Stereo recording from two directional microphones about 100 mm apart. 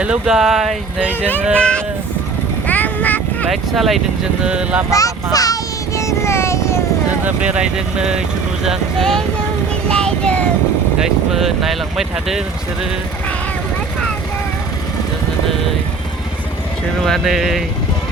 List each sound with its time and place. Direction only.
0.0 s speech: 10° right (ahead or behind)
1.5 s speech: 10° left (ahead or behind)
2.6 s quack: 15° left (ahead or behind)
3.5 s speech: centre (ahead or behind)
4.4 s speech: 10° right (ahead or behind)
4.9 s child singing: 35° left (ahead or behind)
7.3 s speech: 10° right (ahead or behind); by 9.2 s 5° left (ahead or behind)
9.9 s child singing: 10° left (ahead or behind)
11.0 s speech: centre (ahead or behind)
17.0 s speech: centre (ahead or behind)